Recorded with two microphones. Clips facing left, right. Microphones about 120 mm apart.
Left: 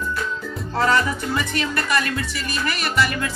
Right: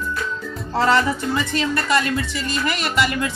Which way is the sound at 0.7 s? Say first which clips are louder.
Right 2 dB; 25° right (ahead or behind).